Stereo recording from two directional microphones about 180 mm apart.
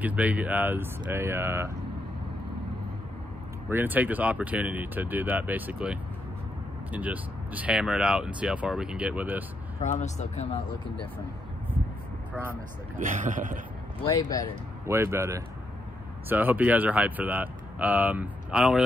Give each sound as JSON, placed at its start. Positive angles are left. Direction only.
{"t": 0.0, "sound": "speech", "side_deg": -10}
{"t": 3.6, "sound": "speech", "side_deg": -10}
{"t": 9.8, "sound": "speech", "side_deg": 40}
{"t": 13.0, "sound": "speech", "side_deg": -45}
{"t": 14.0, "sound": "speech", "side_deg": 20}
{"t": 14.9, "sound": "speech", "side_deg": -15}